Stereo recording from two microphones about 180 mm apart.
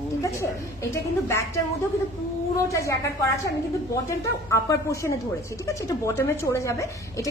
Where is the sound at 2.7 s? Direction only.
15° left (ahead or behind).